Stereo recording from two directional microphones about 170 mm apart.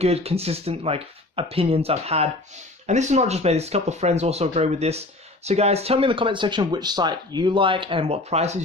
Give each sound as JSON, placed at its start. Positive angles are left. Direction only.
{"t": 0.0, "sound": "speech", "side_deg": -35}